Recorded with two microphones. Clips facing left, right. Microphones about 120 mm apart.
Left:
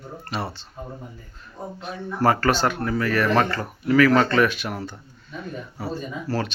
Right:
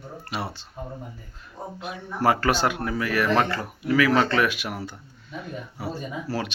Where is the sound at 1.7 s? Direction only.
10° right (ahead or behind).